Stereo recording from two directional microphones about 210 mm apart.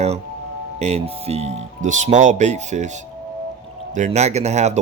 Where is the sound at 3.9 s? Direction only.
35° right (ahead or behind).